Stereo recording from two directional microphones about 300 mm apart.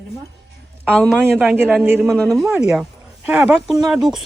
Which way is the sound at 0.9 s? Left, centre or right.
Centre.